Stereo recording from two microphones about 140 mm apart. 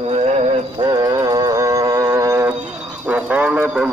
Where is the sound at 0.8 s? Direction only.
30° right (ahead or behind).